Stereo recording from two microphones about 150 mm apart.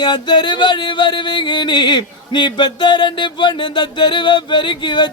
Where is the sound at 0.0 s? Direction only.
30° left (ahead or behind).